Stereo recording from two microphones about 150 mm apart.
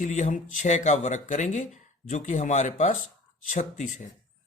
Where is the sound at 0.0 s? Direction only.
55° left (ahead or behind).